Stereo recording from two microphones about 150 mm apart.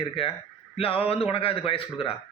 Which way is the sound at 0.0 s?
40° left (ahead or behind).